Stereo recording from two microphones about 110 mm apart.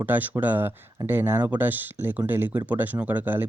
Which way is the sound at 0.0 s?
15° right (ahead or behind).